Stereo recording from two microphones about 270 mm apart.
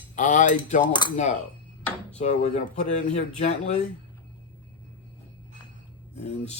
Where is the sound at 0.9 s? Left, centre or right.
Centre.